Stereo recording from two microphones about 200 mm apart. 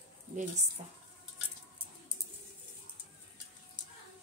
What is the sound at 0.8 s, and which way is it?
Speech, 35° right (ahead or behind).